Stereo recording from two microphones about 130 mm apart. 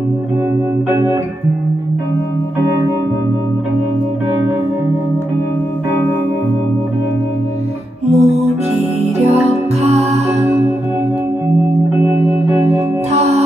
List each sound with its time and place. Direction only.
0.8 s music: 20° right (ahead or behind)
8.1 s music: 55° right (ahead or behind)
12.0 s music: 15° right (ahead or behind)
13.1 s music: 55° right (ahead or behind)